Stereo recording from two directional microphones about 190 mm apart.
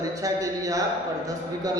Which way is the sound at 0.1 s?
15° right (ahead or behind).